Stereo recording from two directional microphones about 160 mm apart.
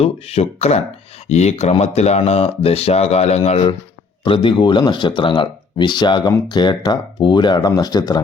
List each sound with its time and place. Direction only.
0.0 s speech: 40° left (ahead or behind); by 8.2 s 25° left (ahead or behind)